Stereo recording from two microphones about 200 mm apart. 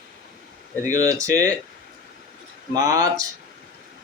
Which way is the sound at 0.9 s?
15° right (ahead or behind).